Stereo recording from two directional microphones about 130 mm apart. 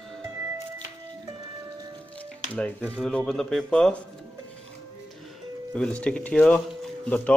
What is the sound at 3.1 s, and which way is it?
Speech, 5° left (ahead or behind).